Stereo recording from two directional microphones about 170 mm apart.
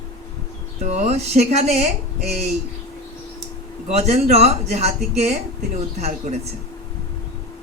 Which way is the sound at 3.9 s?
40° right (ahead or behind).